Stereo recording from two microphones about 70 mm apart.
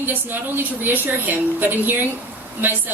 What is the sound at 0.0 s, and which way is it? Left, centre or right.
A woman's voice, right.